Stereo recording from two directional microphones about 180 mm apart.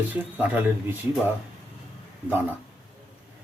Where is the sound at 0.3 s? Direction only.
10° right (ahead or behind).